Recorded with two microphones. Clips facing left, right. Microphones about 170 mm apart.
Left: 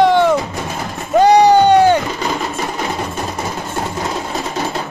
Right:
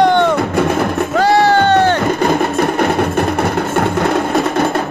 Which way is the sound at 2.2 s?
60° right (ahead or behind).